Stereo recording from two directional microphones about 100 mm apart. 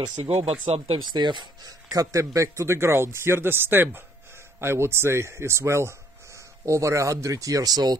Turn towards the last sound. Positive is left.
turn(degrees=-40)  # may be behind; listen again after turning